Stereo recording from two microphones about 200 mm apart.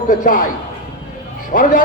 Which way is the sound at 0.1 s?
45° left (ahead or behind).